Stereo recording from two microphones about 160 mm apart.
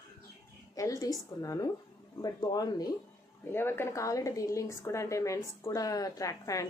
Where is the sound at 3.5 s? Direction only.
15° left (ahead or behind).